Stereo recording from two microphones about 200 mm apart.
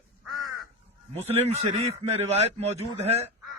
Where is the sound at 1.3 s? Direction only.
30° right (ahead or behind).